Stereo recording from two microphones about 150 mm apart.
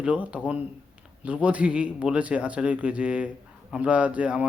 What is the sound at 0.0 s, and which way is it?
A man's voice, 5° right (ahead or behind).